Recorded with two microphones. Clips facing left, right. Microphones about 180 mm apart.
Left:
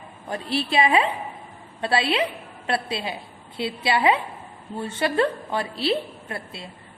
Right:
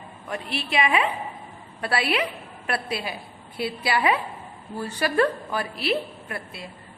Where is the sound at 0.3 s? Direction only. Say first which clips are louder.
Left 4 dB; 30° left (ahead or behind).